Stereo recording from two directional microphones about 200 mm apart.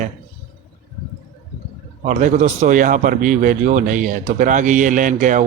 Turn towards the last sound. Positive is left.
turn(degrees=-40)  # may be behind; listen again after turning